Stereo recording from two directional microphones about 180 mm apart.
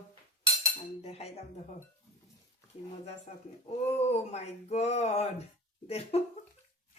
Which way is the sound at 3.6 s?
35° left (ahead or behind).